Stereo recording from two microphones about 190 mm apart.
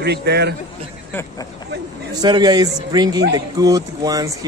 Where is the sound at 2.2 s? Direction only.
20° right (ahead or behind).